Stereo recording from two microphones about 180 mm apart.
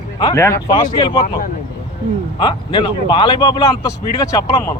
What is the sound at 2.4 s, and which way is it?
Speech, 25° left (ahead or behind).